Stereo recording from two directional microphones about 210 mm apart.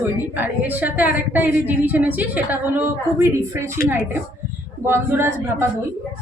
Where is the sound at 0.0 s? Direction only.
10° right (ahead or behind).